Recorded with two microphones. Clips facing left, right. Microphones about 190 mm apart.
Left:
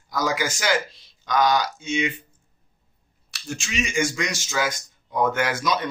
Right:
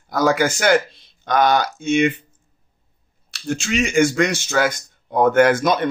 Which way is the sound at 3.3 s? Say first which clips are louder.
Right 8 dB; 65° right (ahead or behind).